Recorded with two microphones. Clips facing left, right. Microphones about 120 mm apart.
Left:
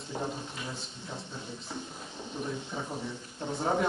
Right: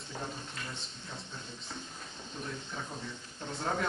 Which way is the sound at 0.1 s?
15° left (ahead or behind).